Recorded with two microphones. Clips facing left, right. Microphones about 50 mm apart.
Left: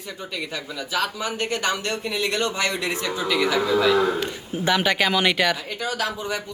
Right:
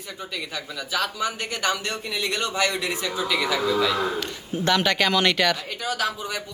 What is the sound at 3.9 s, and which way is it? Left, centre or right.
A man's voice, centre.